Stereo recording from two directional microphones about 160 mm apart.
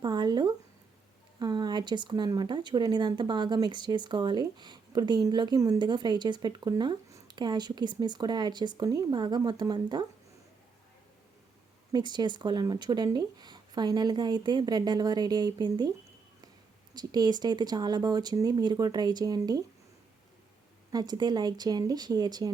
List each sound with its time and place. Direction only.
0.0 s a sound: 25° right (ahead or behind)
1.4 s speech: 25° right (ahead or behind)
11.9 s speech: 25° right (ahead or behind)
16.9 s speech: 25° right (ahead or behind)
20.9 s speech: 25° right (ahead or behind)